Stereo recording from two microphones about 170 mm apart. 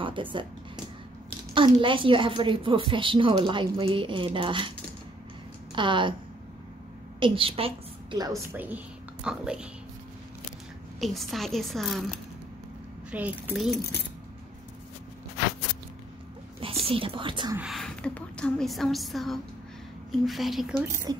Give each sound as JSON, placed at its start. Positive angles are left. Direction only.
{"t": 0.0, "sound": "speech", "side_deg": -30}
{"t": 1.5, "sound": "a woman's voice", "side_deg": -30}
{"t": 5.8, "sound": "a woman's voice", "side_deg": -30}
{"t": 7.2, "sound": "a woman's voice", "side_deg": -30}
{"t": 8.5, "sound": "a woman's voice", "side_deg": -10}
{"t": 11.0, "sound": "a woman's voice", "side_deg": 0}
{"t": 13.1, "sound": "speech", "side_deg": -10}
{"t": 16.8, "sound": "speech", "side_deg": -30}
{"t": 17.6, "sound": "a woman's voice", "side_deg": 0}
{"t": 20.8, "sound": "a woman's voice", "side_deg": -20}